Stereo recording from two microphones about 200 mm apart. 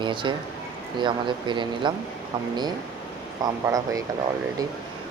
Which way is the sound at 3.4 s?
15° right (ahead or behind).